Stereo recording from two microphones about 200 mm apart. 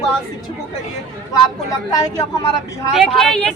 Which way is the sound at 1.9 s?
20° left (ahead or behind).